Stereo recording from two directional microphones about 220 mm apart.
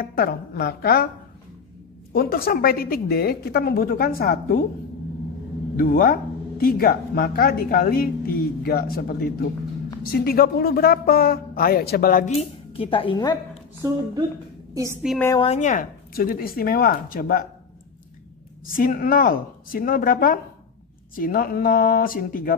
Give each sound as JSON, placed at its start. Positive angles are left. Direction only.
{"t": 0.0, "sound": "a woman's voice", "side_deg": 45}
{"t": 2.1, "sound": "a woman's voice", "side_deg": 40}
{"t": 5.8, "sound": "a woman's voice", "side_deg": 40}
{"t": 12.7, "sound": "a woman's voice", "side_deg": 25}
{"t": 14.7, "sound": "a woman's voice", "side_deg": -15}
{"t": 15.0, "sound": "a woman's voice", "side_deg": 5}
{"t": 15.3, "sound": "speech", "side_deg": 30}
{"t": 18.7, "sound": "speech", "side_deg": 40}